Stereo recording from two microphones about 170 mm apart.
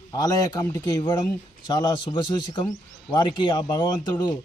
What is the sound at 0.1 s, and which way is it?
Speech, 20° left (ahead or behind).